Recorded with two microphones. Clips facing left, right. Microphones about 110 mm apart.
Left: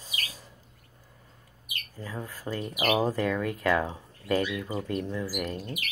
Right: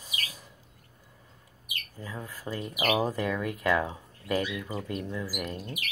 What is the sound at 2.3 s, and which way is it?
Speech, 40° left (ahead or behind).